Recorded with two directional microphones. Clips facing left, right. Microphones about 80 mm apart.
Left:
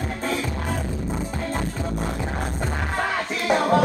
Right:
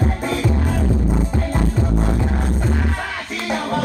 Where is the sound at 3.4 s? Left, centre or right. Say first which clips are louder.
Left 3 dB; centre.